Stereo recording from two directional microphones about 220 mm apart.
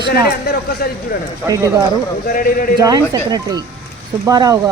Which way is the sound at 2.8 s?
15° right (ahead or behind).